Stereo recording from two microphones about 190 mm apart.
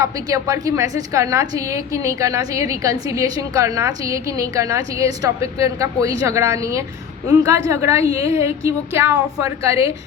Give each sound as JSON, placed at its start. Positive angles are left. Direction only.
{"t": 0.0, "sound": "a woman's voice", "side_deg": -15}